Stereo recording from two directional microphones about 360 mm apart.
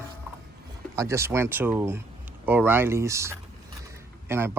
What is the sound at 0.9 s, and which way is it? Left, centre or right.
Speech, centre.